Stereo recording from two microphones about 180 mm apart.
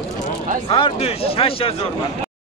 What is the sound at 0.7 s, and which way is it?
Speech, 30° left (ahead or behind).